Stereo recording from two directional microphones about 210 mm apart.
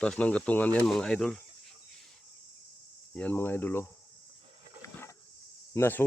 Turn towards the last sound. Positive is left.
turn(degrees=10)  # may be behind; listen again after turning